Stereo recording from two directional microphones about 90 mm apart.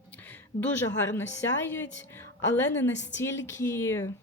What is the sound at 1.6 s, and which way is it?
Speech, 25° left (ahead or behind).